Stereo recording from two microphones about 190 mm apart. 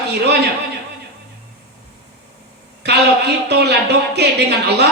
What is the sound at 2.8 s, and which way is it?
Music, 60° right (ahead or behind).